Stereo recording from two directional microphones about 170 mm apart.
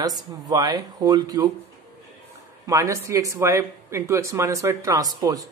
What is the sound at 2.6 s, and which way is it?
Speech, 20° right (ahead or behind).